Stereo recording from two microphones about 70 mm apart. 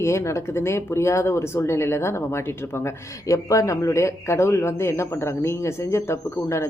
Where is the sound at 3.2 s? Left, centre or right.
Left.